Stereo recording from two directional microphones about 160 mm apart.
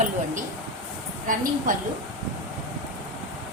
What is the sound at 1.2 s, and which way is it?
Speech, 55° right (ahead or behind).